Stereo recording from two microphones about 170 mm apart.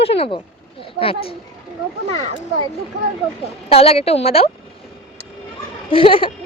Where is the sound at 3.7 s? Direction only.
35° left (ahead or behind).